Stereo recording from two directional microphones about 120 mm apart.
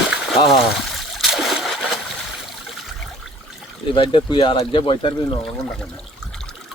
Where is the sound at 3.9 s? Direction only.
50° left (ahead or behind).